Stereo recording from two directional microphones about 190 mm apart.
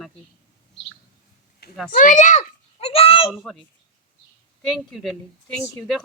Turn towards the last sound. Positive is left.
turn(degrees=5)  # may be behind; listen again after turning